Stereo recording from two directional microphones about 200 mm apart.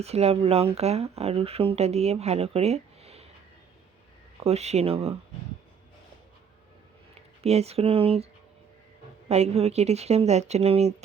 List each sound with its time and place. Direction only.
0.0 s speech: 30° right (ahead or behind)
4.4 s speech: 35° right (ahead or behind)
7.4 s speech: 30° right (ahead or behind)
9.3 s speech: 30° right (ahead or behind)